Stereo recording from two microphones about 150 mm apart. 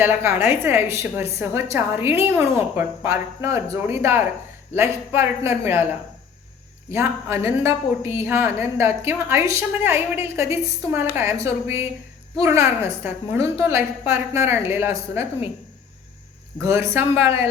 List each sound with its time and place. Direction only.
0.0 s a woman's voice: 15° right (ahead or behind)
6.9 s a woman's voice: 15° right (ahead or behind)
16.6 s a woman's voice: 20° right (ahead or behind)